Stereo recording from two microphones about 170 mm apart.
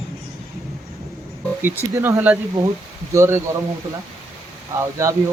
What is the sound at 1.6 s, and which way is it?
Speech, 15° right (ahead or behind).